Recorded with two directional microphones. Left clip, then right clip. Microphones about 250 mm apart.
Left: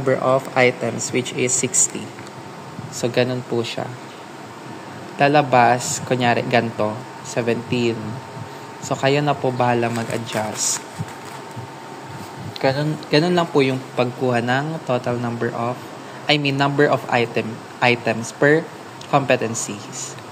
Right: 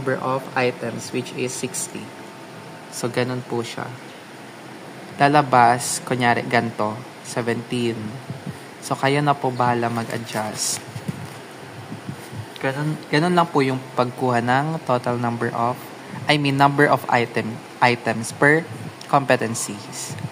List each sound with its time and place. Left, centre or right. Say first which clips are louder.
0.0 s speech: left 5 dB; centre
3.0 s speech: left 4 dB; centre
5.2 s speech: even; centre
12.6 s speech: left 5 dB; centre